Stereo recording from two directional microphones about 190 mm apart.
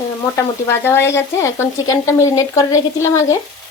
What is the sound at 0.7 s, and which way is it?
Speech, 10° left (ahead or behind).